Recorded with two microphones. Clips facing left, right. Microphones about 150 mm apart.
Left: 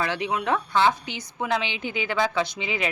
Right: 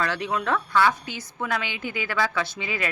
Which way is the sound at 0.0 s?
15° left (ahead or behind).